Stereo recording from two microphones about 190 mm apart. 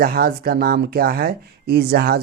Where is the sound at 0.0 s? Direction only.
50° right (ahead or behind).